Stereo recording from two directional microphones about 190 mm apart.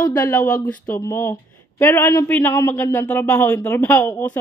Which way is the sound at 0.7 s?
5° left (ahead or behind).